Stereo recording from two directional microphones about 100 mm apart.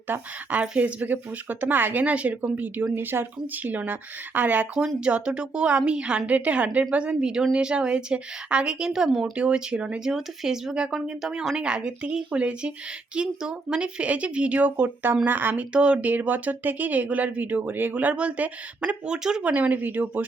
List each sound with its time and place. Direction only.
0.1 s speech: 15° right (ahead or behind)
9.3 s speech: 10° right (ahead or behind)